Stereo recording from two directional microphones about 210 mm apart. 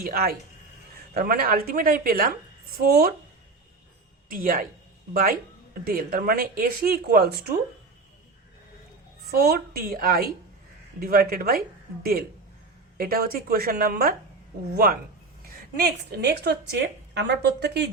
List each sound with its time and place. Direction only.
0.0 s a woman's voice: 45° right (ahead or behind)
4.3 s a woman's voice: 40° right (ahead or behind)
9.2 s a woman's voice: 50° right (ahead or behind)
13.0 s a woman's voice: 45° right (ahead or behind)